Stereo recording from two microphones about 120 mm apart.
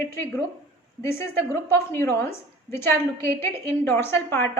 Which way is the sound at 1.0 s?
20° left (ahead or behind).